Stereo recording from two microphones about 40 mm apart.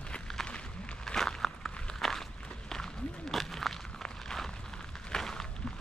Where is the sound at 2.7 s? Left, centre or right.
Centre.